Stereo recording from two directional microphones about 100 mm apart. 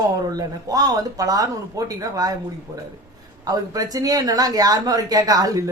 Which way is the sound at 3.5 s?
40° right (ahead or behind).